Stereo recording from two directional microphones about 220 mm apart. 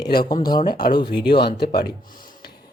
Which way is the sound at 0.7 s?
45° left (ahead or behind).